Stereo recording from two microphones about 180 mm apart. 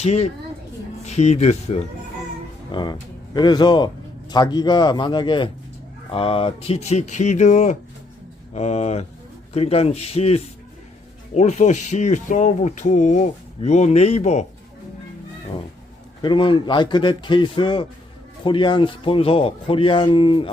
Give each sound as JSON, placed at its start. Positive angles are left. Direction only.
{"t": 0.0, "sound": "speech", "side_deg": 35}
{"t": 2.7, "sound": "speech", "side_deg": 25}
{"t": 16.2, "sound": "speech", "side_deg": 25}